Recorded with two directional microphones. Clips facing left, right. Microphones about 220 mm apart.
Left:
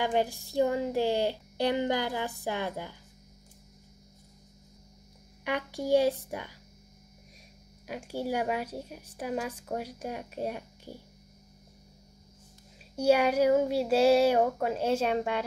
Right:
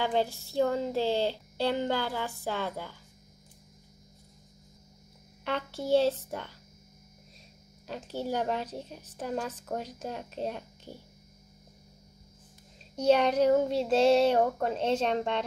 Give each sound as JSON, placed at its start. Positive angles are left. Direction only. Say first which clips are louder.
{"t": 0.0, "sound": "a woman's voice", "louder": "left 1 dB", "side_deg": 15}
{"t": 5.4, "sound": "a woman's voice", "louder": "left 1 dB", "side_deg": 15}
{"t": 7.8, "sound": "a woman's voice", "louder": "left 1 dB", "side_deg": 10}
{"t": 12.9, "sound": "a woman's voice", "louder": "even", "side_deg": 10}